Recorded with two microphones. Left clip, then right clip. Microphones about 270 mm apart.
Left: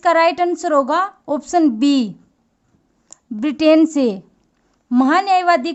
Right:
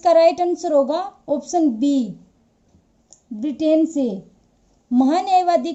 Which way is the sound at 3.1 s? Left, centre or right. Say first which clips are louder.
Left 4 dB; left.